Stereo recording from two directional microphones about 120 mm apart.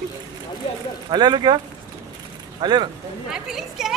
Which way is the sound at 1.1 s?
35° right (ahead or behind).